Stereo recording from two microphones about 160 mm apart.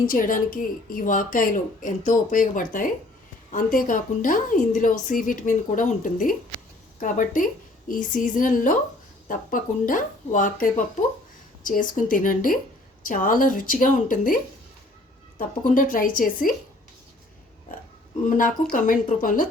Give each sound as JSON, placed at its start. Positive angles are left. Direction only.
{"t": 0.1, "sound": "a woman's voice", "side_deg": 55}
{"t": 15.4, "sound": "a woman's voice", "side_deg": 55}
{"t": 18.3, "sound": "a woman's voice", "side_deg": 55}